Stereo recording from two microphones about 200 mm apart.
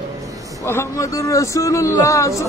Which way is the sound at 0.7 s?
15° left (ahead or behind).